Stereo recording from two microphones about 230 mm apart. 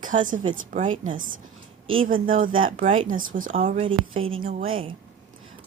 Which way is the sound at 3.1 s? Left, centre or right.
Right.